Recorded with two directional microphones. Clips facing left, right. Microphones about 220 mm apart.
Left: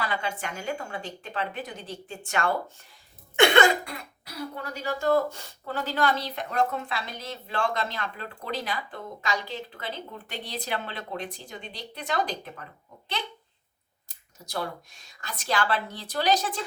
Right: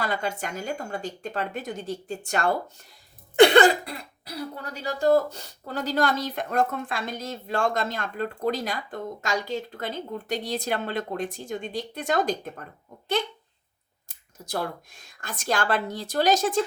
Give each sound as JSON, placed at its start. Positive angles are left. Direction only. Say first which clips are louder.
{"t": 0.0, "sound": "a woman's voice", "louder": "right 3 dB", "side_deg": -40}
{"t": 14.3, "sound": "speech", "louder": "right 3 dB", "side_deg": -50}